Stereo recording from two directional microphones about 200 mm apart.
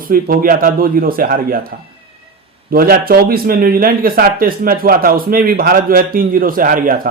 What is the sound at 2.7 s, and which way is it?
A man's voice, 45° right (ahead or behind).